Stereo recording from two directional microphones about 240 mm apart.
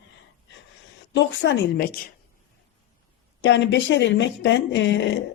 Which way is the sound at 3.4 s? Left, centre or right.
Left.